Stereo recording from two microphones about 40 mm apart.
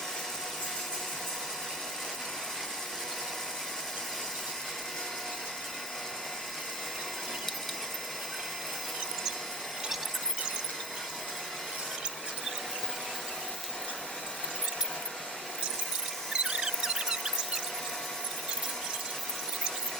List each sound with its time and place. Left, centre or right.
16.3 s squeal: right